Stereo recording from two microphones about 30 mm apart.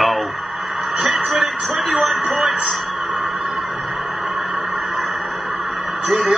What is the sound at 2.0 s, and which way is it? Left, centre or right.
Speech, centre.